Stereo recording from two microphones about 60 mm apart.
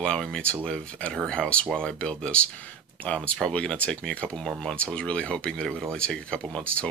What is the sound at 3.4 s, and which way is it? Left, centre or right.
Speech, centre.